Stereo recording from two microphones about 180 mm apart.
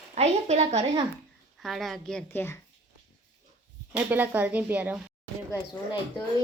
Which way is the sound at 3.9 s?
10° right (ahead or behind).